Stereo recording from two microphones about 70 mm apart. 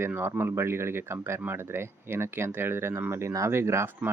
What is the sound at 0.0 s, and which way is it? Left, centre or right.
Speech, right.